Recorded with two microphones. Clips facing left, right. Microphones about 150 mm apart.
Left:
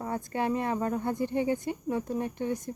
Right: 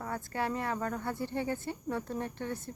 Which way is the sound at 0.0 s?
20° left (ahead or behind).